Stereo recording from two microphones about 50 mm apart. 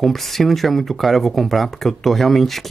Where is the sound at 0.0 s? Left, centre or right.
Centre.